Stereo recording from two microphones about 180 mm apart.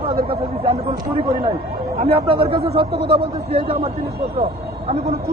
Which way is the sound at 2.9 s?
65° right (ahead or behind).